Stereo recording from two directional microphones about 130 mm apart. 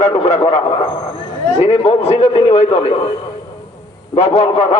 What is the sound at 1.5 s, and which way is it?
A man's voice, 55° left (ahead or behind).